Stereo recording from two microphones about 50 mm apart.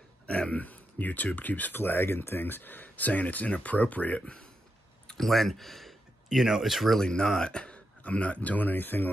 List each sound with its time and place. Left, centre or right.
0.3 s speech: left
1.8 s speech: left
5.1 s speech: centre
7.0 s speech: centre; by 9.1 s left